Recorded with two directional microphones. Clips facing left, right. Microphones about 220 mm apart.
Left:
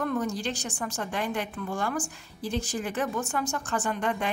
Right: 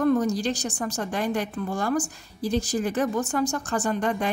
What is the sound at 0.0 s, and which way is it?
Speech, 35° right (ahead or behind).